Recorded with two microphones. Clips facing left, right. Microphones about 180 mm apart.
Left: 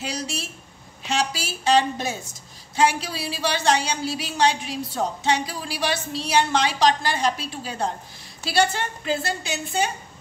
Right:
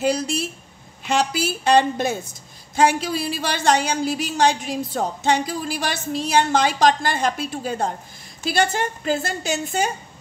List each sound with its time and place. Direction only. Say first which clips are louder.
0.0 s a woman's voice: right 9 dB; 55° right (ahead or behind)